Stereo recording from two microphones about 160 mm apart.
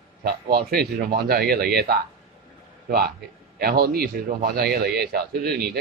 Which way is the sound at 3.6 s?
70° right (ahead or behind).